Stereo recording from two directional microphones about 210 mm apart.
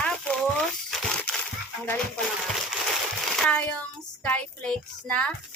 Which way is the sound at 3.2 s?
5° left (ahead or behind).